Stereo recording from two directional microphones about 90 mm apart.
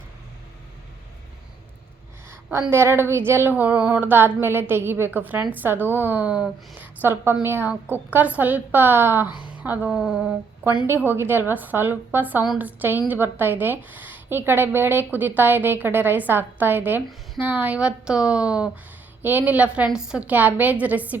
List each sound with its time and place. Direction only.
2.5 s a woman's voice: 30° right (ahead or behind)
3.5 s a woman's voice: 15° right (ahead or behind)
7.0 s a woman's voice: 25° right (ahead or behind)
10.8 s a woman's voice: 25° right (ahead or behind)